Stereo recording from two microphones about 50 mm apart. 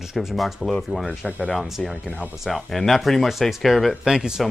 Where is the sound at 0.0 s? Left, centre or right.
Centre.